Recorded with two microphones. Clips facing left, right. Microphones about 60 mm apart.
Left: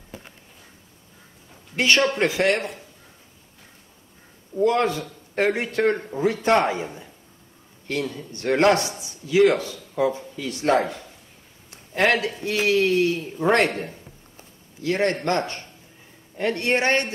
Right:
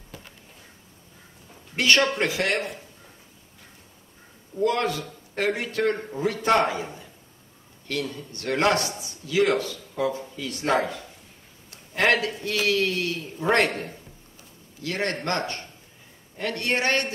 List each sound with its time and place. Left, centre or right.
0.1 s a sound: left
1.8 s a man's voice: left
4.6 s a man's voice: left
11.7 s a man's voice: left
14.3 s a sound: left
16.3 s a man's voice: left